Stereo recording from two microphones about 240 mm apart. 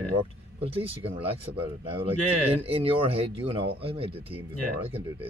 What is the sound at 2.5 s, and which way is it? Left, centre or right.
Speech, right.